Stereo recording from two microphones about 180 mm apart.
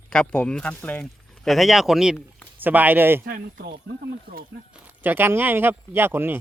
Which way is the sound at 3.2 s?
55° right (ahead or behind).